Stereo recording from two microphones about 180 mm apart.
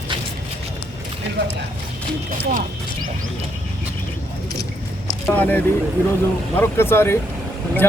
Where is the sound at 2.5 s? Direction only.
50° right (ahead or behind).